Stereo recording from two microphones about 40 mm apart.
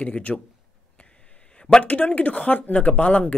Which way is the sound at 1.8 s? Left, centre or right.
Left.